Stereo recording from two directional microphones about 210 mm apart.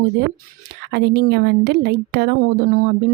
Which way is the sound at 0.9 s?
50° right (ahead or behind).